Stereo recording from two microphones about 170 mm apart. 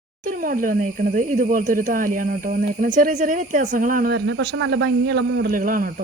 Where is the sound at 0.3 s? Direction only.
55° right (ahead or behind).